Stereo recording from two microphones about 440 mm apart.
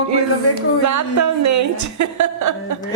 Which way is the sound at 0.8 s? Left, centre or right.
Right.